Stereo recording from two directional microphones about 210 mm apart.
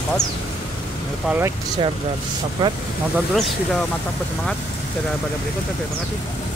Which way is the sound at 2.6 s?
20° right (ahead or behind).